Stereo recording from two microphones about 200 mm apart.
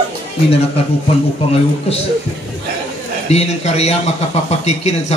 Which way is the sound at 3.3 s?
30° left (ahead or behind).